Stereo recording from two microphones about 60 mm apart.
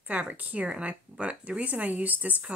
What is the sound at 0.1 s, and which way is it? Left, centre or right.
Speech, right.